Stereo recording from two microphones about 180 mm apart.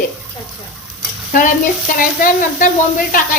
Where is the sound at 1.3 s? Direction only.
50° left (ahead or behind).